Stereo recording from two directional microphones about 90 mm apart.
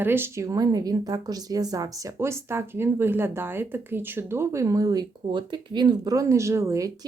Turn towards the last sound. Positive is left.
turn(degrees=-35)  # may be behind; listen again after turning